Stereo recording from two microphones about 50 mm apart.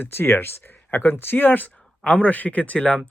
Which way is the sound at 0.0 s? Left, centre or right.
Left.